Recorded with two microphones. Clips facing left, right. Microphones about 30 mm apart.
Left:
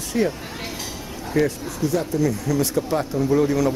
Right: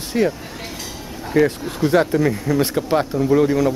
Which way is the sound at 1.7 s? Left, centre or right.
Right.